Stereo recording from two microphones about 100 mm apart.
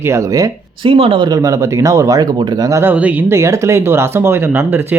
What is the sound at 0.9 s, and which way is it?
Speech, 70° right (ahead or behind).